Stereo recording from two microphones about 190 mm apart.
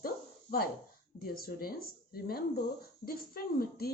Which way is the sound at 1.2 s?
50° left (ahead or behind).